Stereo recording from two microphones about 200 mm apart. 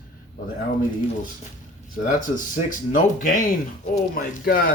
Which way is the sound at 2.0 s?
40° left (ahead or behind).